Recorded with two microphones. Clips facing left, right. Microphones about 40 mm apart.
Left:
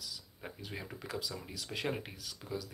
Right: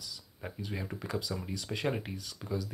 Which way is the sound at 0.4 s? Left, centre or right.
Centre.